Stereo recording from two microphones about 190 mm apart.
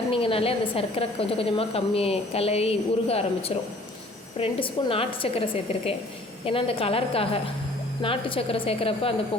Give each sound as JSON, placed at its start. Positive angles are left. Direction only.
{"t": 0.1, "sound": "a woman's voice", "side_deg": 30}
{"t": 4.4, "sound": "a woman's voice", "side_deg": 30}
{"t": 6.4, "sound": "a woman's voice", "side_deg": 30}